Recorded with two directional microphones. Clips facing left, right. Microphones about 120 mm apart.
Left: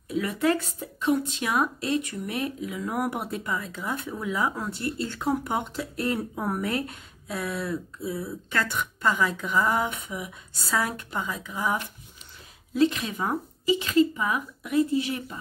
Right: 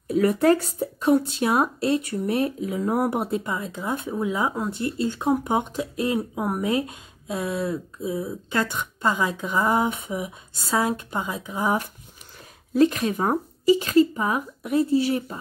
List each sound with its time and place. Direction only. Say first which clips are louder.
0.1 s speech: right 6 dB; 40° right (ahead or behind)
12.7 s speech: right 4 dB; 45° right (ahead or behind)